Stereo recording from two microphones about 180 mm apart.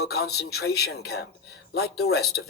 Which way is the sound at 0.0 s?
60° left (ahead or behind).